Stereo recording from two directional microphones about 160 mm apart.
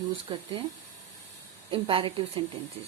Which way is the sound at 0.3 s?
30° right (ahead or behind).